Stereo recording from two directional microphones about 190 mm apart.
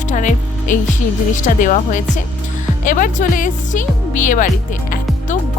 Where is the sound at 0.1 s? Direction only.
40° left (ahead or behind).